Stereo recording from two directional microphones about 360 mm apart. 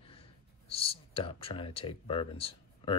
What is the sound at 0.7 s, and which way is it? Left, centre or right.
Speech, centre.